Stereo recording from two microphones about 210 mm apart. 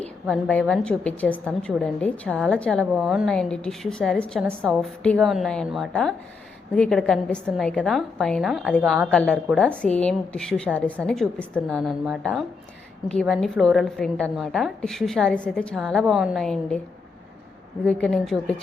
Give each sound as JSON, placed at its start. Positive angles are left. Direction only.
{"t": 0.0, "sound": "a woman's voice", "side_deg": 5}
{"t": 17.8, "sound": "a woman's voice", "side_deg": 5}